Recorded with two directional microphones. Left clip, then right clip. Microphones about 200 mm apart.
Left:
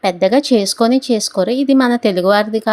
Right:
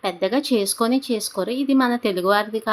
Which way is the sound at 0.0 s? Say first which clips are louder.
Left 9 dB; 30° left (ahead or behind).